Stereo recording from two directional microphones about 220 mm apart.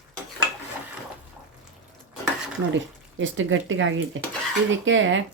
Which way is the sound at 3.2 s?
60° right (ahead or behind).